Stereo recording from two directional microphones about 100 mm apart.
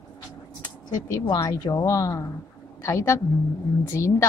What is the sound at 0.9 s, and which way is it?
A woman's voice, 35° left (ahead or behind).